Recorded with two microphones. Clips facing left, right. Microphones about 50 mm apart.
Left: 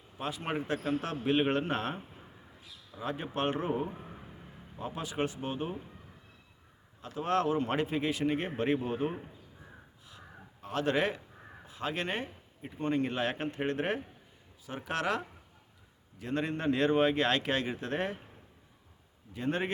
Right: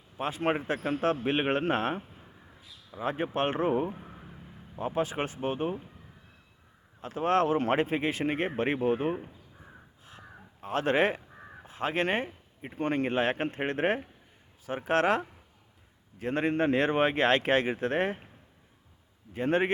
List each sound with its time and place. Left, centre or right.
0.2 s speech: right
3.0 s speech: right
3.9 s a sound: centre
4.8 s speech: right
7.0 s speech: right
10.1 s a sound: right
12.7 s speech: right
19.3 s speech: right